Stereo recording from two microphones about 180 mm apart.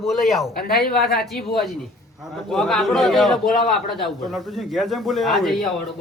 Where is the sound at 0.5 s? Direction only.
60° left (ahead or behind).